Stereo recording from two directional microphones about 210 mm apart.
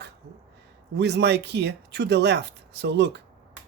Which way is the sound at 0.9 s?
55° right (ahead or behind).